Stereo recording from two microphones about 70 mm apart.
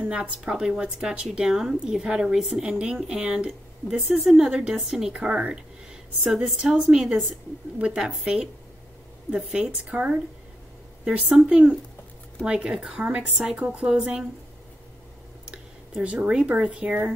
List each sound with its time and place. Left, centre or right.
0.0 s a woman's voice: centre
15.5 s speech: centre